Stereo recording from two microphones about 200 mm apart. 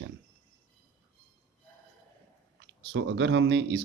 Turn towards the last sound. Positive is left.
turn(degrees=-65)  # may be behind; listen again after turning